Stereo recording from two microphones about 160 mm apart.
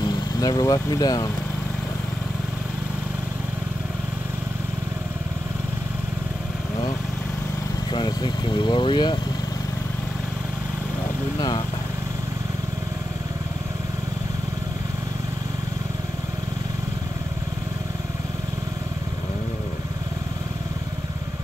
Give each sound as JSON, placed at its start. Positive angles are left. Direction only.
{"t": 0.0, "sound": "speech", "side_deg": 25}
{"t": 7.9, "sound": "speech", "side_deg": 30}